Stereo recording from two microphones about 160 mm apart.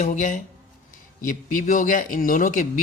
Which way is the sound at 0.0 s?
50° left (ahead or behind).